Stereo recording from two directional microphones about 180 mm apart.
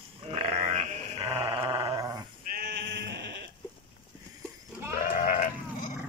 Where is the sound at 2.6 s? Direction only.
75° right (ahead or behind).